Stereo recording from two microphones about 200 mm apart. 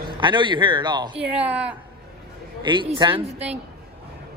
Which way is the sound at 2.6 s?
25° right (ahead or behind).